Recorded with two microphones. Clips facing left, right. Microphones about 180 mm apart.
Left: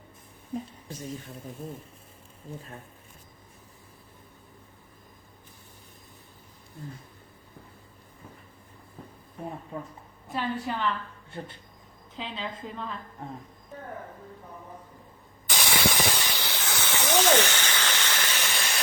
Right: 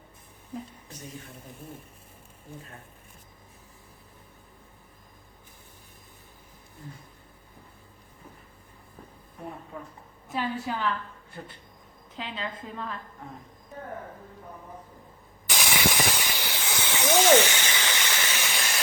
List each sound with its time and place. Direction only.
10.3 s a woman's voice: 5° right (ahead or behind)
12.1 s a woman's voice: centre (ahead or behind)
15.5 s a sound: 10° right (ahead or behind)